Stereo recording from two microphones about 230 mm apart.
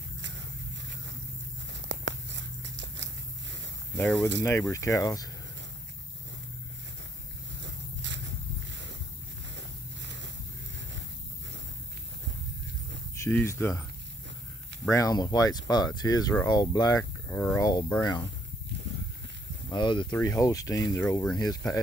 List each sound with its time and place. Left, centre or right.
1.7 s a sound: right
3.9 s speech: centre
7.6 s a sound: right
9.6 s a sound: right
13.2 s speech: centre
14.9 s speech: centre
17.3 s speech: centre
17.6 s speech: centre
19.7 s speech: centre